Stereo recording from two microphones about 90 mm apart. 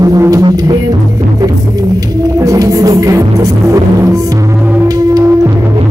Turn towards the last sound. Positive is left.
turn(degrees=-30)  # may be behind; listen again after turning